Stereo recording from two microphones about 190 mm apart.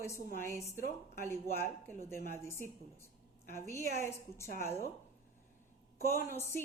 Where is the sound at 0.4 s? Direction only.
15° left (ahead or behind).